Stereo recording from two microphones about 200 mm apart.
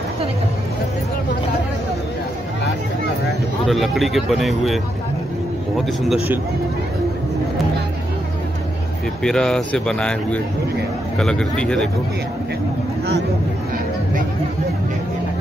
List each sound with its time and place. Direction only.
3.6 s speech: centre (ahead or behind)
9.2 s speech: 5° left (ahead or behind)